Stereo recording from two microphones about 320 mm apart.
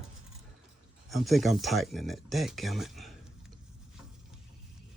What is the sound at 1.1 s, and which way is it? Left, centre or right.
Speech, centre.